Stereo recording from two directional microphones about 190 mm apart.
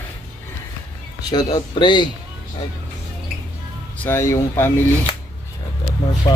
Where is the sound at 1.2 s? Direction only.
20° left (ahead or behind).